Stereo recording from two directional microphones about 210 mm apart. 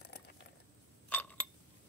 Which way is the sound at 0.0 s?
50° left (ahead or behind).